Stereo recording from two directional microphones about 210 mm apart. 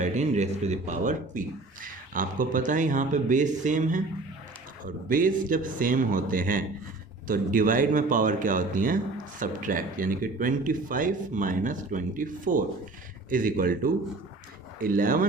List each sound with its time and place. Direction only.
0.0 s speech: 35° right (ahead or behind)